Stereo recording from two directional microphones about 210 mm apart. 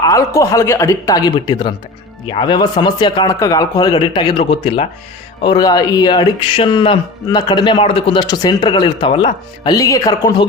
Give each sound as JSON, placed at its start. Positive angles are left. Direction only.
{"t": 0.0, "sound": "a man's voice", "side_deg": 15}